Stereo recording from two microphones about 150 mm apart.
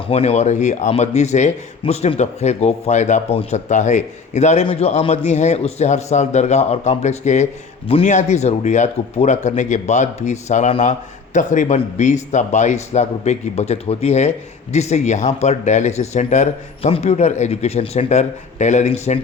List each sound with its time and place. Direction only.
0.1 s speech: 45° left (ahead or behind)